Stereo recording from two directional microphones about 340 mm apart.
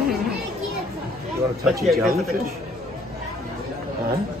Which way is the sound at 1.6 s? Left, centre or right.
Centre.